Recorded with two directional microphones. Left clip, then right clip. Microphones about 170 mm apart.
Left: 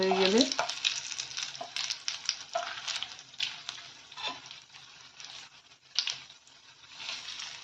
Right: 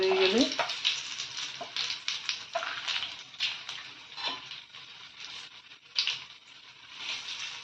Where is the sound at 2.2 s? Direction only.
40° left (ahead or behind).